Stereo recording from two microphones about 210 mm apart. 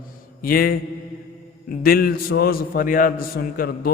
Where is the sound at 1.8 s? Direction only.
45° left (ahead or behind).